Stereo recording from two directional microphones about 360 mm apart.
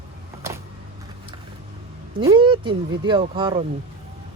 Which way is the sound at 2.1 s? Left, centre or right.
Centre.